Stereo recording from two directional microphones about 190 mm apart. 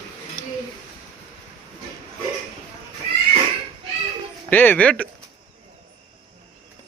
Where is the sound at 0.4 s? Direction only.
40° left (ahead or behind).